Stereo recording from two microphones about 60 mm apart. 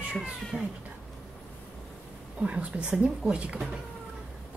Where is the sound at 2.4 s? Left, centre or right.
Centre.